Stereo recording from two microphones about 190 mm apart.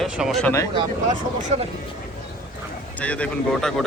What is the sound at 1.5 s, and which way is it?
Speech, 35° right (ahead or behind).